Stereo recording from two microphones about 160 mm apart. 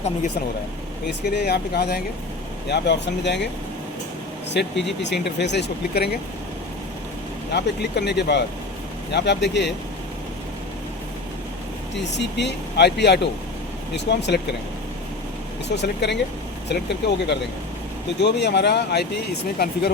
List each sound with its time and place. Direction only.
1.3 s speech: 90° left
4.6 s speech: 90° left
7.5 s speech: 90° left
11.9 s speech: 90° left
15.7 s speech: 90° left